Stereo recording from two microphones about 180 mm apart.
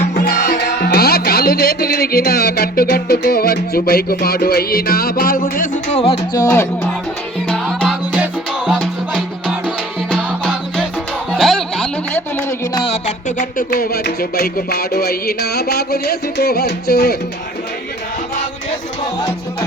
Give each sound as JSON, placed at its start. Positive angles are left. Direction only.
{"t": 0.2, "sound": "music", "side_deg": 50}
{"t": 0.9, "sound": "music", "side_deg": 60}
{"t": 6.1, "sound": "music", "side_deg": 20}
{"t": 7.4, "sound": "music", "side_deg": 5}
{"t": 12.7, "sound": "music", "side_deg": 30}